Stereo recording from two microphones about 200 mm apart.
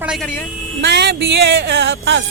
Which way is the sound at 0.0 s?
5° right (ahead or behind).